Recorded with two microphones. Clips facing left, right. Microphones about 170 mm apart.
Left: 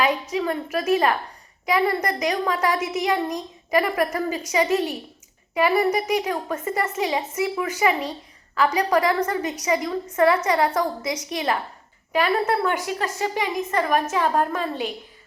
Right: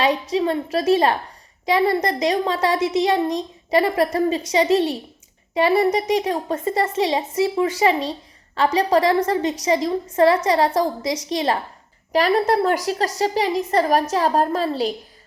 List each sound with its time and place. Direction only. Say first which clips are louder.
0.0 s a woman's voice: right 3 dB; 30° right (ahead or behind)